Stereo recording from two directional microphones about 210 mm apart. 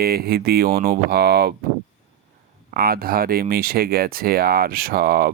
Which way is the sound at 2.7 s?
45° right (ahead or behind).